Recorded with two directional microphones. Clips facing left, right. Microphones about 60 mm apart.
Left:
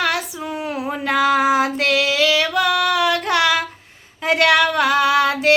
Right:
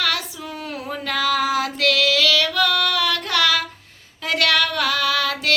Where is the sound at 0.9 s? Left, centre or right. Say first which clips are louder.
Left 5 dB; left.